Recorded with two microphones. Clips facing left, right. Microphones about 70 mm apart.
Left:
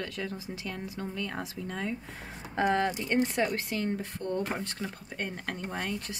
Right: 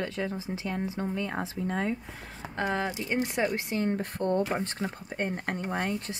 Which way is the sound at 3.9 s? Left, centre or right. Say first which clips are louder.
Right 5 dB; right.